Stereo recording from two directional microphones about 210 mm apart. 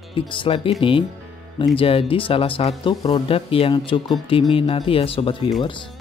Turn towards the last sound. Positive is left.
turn(degrees=25)  # may be behind; listen again after turning